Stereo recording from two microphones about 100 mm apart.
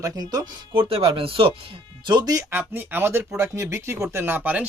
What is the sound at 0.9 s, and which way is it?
Speech, 65° right (ahead or behind).